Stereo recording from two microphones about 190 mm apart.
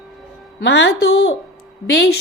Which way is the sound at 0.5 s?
70° left (ahead or behind).